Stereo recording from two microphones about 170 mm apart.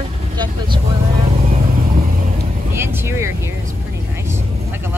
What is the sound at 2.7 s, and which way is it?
Speech, 15° right (ahead or behind).